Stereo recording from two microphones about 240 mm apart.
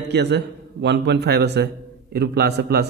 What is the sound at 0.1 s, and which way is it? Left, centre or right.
A man's voice, right.